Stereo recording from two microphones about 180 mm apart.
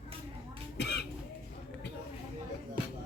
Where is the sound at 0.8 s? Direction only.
70° left (ahead or behind).